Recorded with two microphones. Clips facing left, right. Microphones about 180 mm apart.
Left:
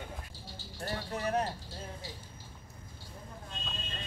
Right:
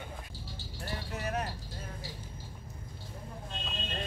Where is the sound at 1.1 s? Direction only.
30° left (ahead or behind).